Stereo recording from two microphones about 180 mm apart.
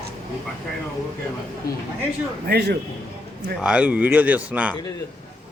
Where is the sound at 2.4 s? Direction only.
65° right (ahead or behind).